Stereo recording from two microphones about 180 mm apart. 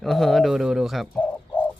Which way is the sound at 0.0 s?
Centre (ahead or behind).